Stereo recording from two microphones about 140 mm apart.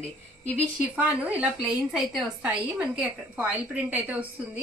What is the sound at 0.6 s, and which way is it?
A woman's voice, 10° right (ahead or behind).